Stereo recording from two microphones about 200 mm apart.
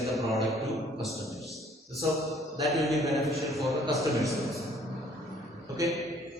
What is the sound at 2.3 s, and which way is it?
Mantra, centre (ahead or behind).